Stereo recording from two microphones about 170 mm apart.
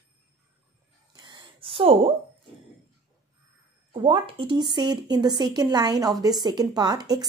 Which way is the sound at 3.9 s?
30° right (ahead or behind).